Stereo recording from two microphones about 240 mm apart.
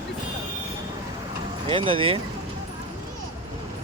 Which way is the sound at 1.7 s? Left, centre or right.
Right.